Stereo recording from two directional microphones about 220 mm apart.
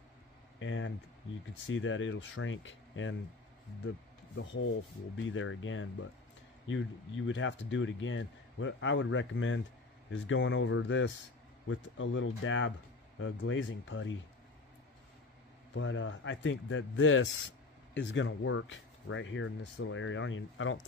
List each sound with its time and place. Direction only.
0.6 s speech: 60° left (ahead or behind)
5.2 s speech: 65° left (ahead or behind)
15.7 s speech: 60° left (ahead or behind)